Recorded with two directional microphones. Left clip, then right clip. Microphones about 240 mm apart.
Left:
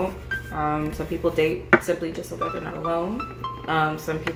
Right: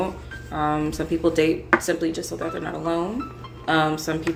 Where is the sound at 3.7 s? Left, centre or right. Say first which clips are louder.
Right 3 dB; right.